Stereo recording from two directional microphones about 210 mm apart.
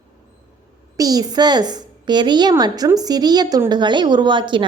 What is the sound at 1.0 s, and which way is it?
A woman's voice, 20° right (ahead or behind).